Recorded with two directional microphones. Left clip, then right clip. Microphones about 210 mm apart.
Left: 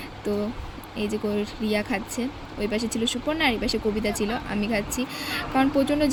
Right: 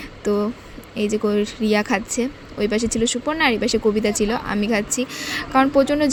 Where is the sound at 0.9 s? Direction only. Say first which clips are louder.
Right 7 dB; 40° right (ahead or behind).